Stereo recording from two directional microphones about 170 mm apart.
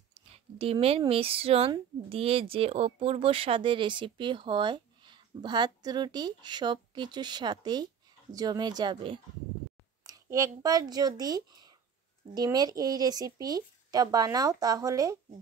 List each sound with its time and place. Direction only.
0.1 s speech: 35° right (ahead or behind)